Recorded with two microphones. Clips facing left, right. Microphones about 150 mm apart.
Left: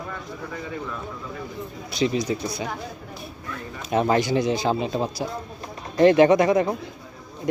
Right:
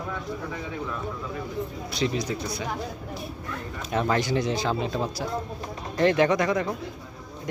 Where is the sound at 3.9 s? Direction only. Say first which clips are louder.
Left 4 dB; 20° left (ahead or behind).